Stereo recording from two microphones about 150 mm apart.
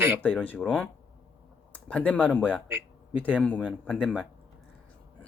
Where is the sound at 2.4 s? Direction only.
10° right (ahead or behind).